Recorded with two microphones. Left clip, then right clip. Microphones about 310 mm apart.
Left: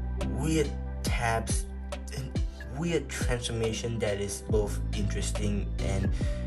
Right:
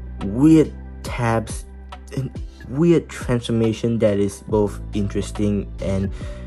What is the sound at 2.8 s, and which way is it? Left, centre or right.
Speech, centre.